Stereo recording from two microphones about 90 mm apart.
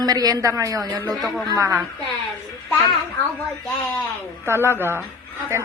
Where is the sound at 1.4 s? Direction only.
40° right (ahead or behind).